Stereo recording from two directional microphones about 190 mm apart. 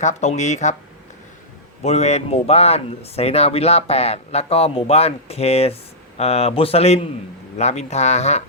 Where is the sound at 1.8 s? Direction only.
35° left (ahead or behind).